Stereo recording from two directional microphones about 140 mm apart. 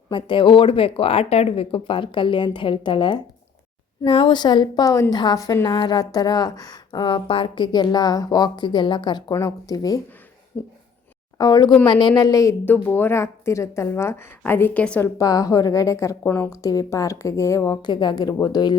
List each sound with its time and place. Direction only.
0.1 s a woman's voice: 35° left (ahead or behind)
10.5 s a woman's voice: 15° left (ahead or behind)
11.3 s speech: 30° left (ahead or behind)
12.6 s a woman's voice: 15° left (ahead or behind)
15.2 s speech: 25° left (ahead or behind)
17.8 s a woman's voice: 30° left (ahead or behind)